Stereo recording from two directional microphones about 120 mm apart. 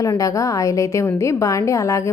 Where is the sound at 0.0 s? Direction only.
30° left (ahead or behind).